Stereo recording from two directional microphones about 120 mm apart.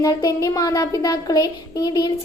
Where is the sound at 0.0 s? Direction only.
30° left (ahead or behind).